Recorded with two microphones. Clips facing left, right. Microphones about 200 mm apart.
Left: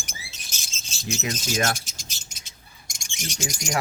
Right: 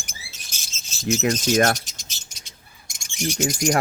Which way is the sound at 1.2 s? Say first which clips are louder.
Right 8 dB; 60° right (ahead or behind).